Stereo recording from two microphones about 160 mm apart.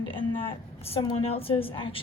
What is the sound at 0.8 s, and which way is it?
A woman's voice, 40° left (ahead or behind).